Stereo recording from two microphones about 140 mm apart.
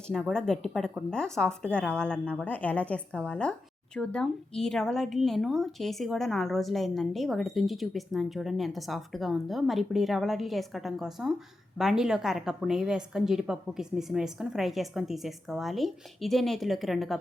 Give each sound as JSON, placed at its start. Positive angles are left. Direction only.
{"t": 0.1, "sound": "a woman's voice", "side_deg": 5}